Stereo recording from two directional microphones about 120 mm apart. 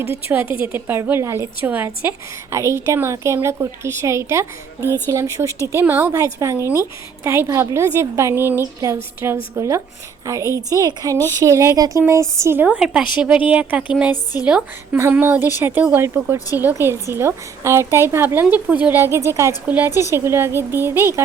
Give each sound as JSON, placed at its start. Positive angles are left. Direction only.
{"t": 0.1, "sound": "a woman's voice", "side_deg": -20}
{"t": 12.6, "sound": "a woman's voice", "side_deg": -5}